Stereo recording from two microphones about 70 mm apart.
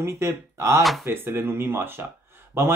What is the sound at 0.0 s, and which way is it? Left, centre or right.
Speech, right.